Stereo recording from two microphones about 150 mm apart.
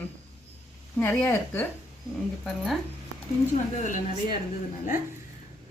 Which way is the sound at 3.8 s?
55° left (ahead or behind).